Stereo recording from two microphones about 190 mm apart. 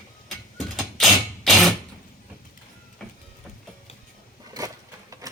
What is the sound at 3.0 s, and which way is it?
Music, centre (ahead or behind).